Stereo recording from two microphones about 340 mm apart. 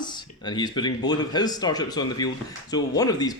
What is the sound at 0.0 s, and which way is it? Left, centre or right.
Speech, centre.